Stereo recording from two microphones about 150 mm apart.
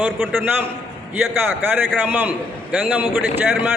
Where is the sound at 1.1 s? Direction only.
10° right (ahead or behind).